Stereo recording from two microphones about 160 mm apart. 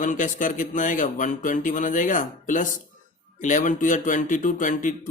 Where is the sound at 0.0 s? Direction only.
55° left (ahead or behind).